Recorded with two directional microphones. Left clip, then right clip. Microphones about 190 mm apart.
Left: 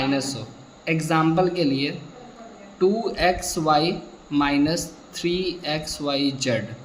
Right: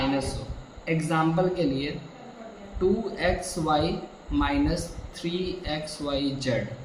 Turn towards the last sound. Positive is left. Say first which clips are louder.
# left 5 dB
turn(degrees=50)  # may be behind; listen again after turning